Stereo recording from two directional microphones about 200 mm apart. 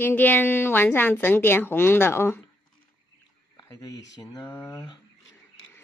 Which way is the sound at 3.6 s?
15° left (ahead or behind).